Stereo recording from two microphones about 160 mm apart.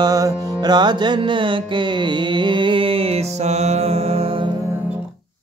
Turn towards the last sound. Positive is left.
turn(degrees=-40)  # may be behind; listen again after turning